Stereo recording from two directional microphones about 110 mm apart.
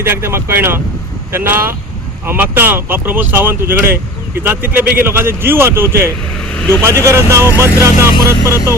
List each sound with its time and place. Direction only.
0.0 s speech: 20° right (ahead or behind)